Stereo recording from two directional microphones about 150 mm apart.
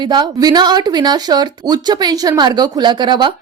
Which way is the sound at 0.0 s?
30° right (ahead or behind).